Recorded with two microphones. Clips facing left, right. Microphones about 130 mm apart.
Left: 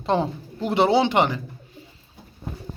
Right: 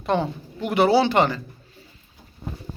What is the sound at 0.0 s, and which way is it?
Speech, 30° left (ahead or behind).